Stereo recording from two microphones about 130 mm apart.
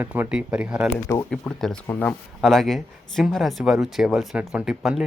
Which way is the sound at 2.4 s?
Centre (ahead or behind).